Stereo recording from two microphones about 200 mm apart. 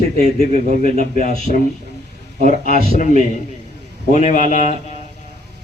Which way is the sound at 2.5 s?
40° left (ahead or behind).